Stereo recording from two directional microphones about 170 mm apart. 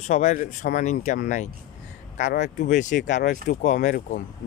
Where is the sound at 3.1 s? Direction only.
90° left.